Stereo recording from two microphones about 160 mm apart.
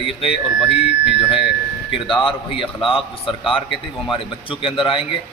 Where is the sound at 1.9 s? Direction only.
30° left (ahead or behind).